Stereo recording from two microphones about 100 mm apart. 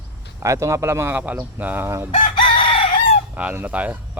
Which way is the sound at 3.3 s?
15° right (ahead or behind).